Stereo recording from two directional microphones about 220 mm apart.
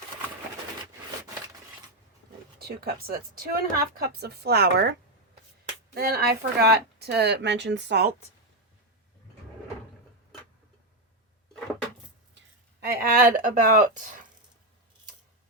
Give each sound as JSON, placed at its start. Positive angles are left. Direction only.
{"t": 2.6, "sound": "speech", "side_deg": -45}
{"t": 12.8, "sound": "speech", "side_deg": -45}